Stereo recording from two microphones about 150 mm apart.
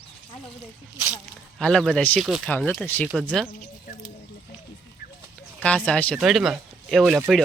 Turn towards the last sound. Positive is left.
turn(degrees=-5)  # may be behind; listen again after turning